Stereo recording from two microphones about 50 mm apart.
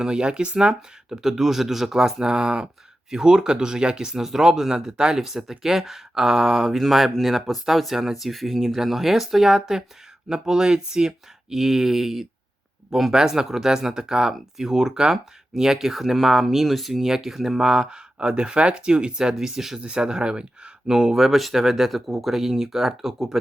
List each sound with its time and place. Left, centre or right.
0.0 s speech: centre
21.2 s speech: centre